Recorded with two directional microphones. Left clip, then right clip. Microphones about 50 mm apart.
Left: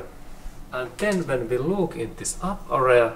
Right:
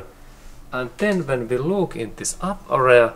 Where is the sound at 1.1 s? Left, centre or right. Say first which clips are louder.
Right 2 dB; right.